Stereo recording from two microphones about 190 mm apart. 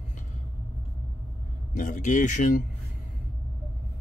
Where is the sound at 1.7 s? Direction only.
40° left (ahead or behind).